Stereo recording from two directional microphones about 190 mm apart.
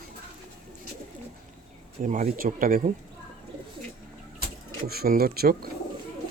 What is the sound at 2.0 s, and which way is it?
Speech, 45° right (ahead or behind).